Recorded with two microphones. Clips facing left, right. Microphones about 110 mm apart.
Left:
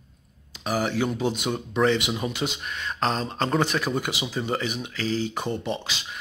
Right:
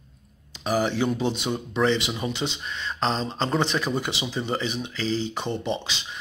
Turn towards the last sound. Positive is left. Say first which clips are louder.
# right 1 dB
turn(degrees=5)  # may be behind; listen again after turning